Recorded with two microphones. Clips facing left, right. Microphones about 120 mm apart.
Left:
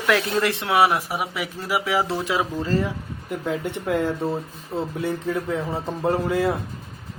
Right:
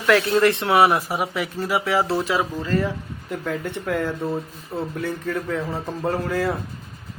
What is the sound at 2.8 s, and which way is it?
Speech, 15° left (ahead or behind).